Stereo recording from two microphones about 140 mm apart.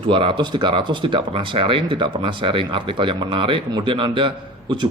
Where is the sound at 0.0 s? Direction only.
40° right (ahead or behind).